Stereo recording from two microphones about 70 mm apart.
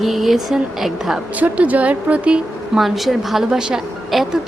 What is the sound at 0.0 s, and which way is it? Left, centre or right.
A woman's voice, centre.